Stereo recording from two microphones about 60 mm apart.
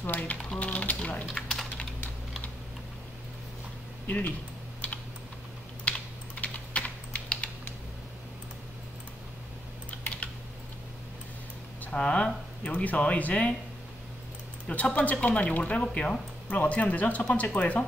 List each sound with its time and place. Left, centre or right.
0.0 s speech: left
0.6 s typing: left
1.2 s typing: centre
5.9 s typing: centre
9.8 s typing: left
11.8 s speech: left
14.7 s speech: left